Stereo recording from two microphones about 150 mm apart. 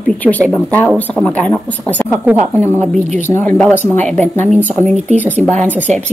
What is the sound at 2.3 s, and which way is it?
Speech, 10° right (ahead or behind).